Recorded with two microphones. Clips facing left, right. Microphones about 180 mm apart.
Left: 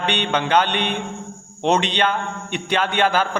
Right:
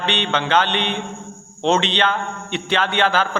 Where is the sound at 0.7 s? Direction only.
50° left (ahead or behind).